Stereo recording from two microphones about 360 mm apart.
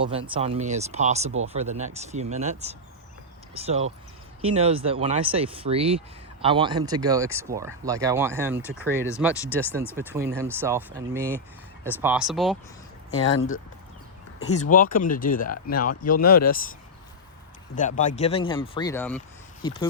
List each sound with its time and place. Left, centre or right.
0.0 s speech: centre
9.3 s speech: centre
9.7 s speech: centre
13.2 s speech: left
14.6 s speech: left
17.7 s speech: left